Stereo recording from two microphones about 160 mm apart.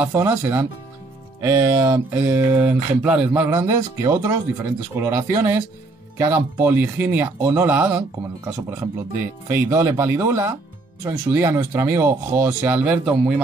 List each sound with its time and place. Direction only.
0.0 s speech: 15° right (ahead or behind)